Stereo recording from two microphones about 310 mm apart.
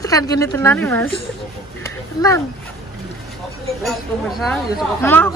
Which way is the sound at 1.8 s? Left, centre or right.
Centre.